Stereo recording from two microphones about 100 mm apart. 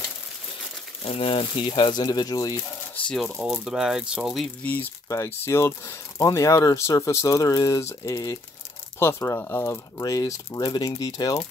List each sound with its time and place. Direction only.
1.0 s speech: 70° left (ahead or behind); by 2.6 s 40° left (ahead or behind)
3.1 s speech: centre (ahead or behind)
4.6 s speech: 20° left (ahead or behind)
5.0 s speech: 30° left (ahead or behind)
9.0 s speech: 25° left (ahead or behind)